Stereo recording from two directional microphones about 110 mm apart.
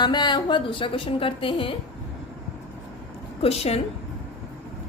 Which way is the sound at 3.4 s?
65° left (ahead or behind).